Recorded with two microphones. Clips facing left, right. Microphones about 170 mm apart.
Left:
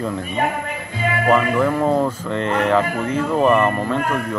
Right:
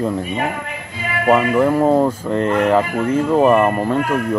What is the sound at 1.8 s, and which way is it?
Speech, 10° right (ahead or behind).